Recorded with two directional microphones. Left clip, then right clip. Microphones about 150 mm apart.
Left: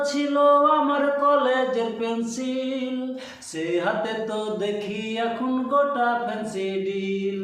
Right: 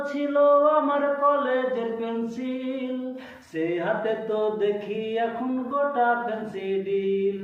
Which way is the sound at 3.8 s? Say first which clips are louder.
Left 1 dB; 35° left (ahead or behind).